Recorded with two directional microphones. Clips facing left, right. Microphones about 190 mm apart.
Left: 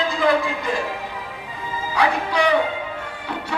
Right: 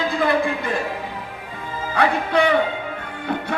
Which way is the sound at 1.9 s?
55° right (ahead or behind).